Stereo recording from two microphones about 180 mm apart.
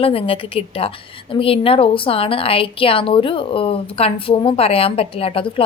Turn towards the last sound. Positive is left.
turn(degrees=30)  # may be behind; listen again after turning